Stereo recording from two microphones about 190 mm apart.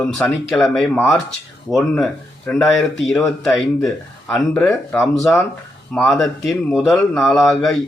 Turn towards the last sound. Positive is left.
turn(degrees=0)  # may be behind; listen again after turning